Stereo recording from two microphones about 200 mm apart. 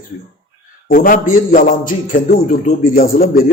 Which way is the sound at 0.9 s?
40° left (ahead or behind).